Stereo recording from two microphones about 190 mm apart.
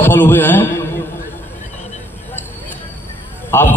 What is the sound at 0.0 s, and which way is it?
Speech, 10° left (ahead or behind).